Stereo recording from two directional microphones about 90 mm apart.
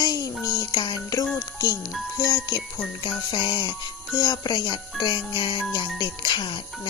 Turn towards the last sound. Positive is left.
turn(degrees=65)  # may be behind; listen again after turning